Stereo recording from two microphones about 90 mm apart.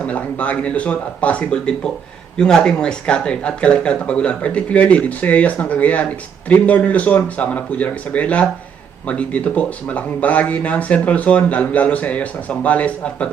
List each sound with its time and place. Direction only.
0.0 s speech: 15° left (ahead or behind)